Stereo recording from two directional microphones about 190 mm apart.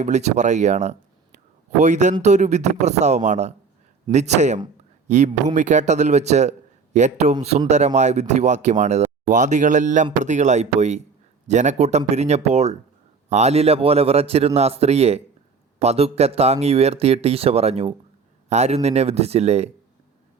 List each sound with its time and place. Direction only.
0.0 s speech: 35° right (ahead or behind)